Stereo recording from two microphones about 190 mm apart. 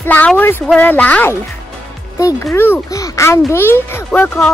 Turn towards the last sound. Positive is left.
turn(degrees=5)  # may be behind; listen again after turning